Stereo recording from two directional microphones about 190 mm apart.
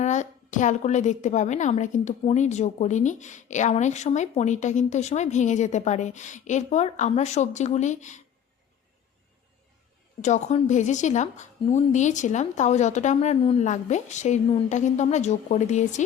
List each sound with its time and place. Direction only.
0.0 s a woman's voice: 40° left (ahead or behind)
10.2 s a woman's voice: 40° left (ahead or behind)